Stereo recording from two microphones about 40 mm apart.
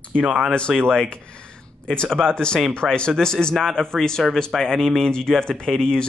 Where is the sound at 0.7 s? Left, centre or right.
Centre.